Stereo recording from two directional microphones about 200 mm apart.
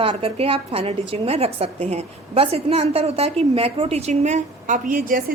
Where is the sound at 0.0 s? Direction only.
30° right (ahead or behind).